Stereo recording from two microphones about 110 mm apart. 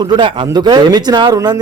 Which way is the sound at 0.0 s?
45° right (ahead or behind).